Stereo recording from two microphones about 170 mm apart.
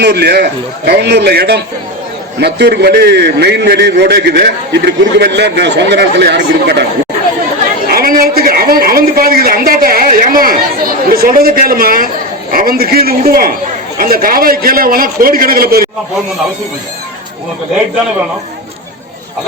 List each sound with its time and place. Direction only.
0.0 s a man's voice: 75° right (ahead or behind)
7.9 s a sound: 60° right (ahead or behind)
11.1 s a man's voice: 60° right (ahead or behind)